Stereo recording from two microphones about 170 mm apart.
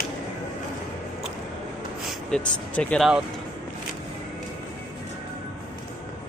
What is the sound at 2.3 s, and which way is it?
Speech, 5° left (ahead or behind).